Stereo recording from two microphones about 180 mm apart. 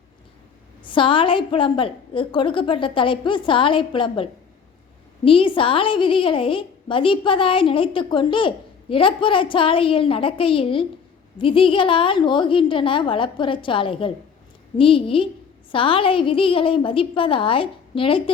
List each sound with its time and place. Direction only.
0.9 s a woman's voice: 30° left (ahead or behind)